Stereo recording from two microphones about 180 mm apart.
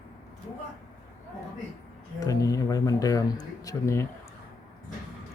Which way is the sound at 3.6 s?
15° left (ahead or behind).